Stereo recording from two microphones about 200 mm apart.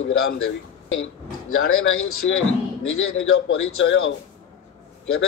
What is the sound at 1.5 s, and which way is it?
A man's voice, 90° left.